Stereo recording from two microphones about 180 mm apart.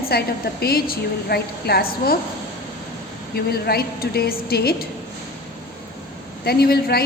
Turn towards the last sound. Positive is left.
turn(degrees=60)  # may be behind; listen again after turning